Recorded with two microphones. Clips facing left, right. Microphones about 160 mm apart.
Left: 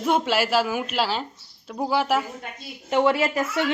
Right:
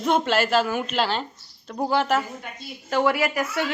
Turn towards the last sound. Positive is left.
turn(degrees=25)  # may be behind; listen again after turning